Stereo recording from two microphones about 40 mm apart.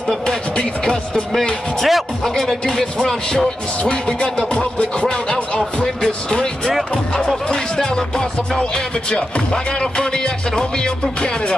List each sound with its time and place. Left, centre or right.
0.6 s music: left
1.8 s speech: centre
2.2 s speech: centre
3.3 s music: left
9.8 s music: centre